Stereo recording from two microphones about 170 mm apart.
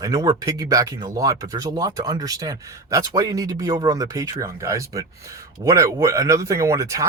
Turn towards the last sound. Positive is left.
turn(degrees=-20)  # may be behind; listen again after turning